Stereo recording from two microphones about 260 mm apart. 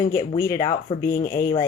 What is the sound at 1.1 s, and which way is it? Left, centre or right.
Speech, left.